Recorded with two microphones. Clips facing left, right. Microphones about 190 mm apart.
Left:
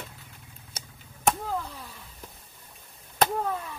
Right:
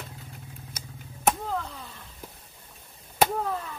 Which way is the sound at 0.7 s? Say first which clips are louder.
Left 4 dB; 30° left (ahead or behind).